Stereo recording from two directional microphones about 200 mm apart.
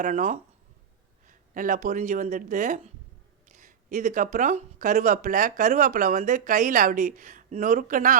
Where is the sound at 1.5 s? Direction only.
40° right (ahead or behind).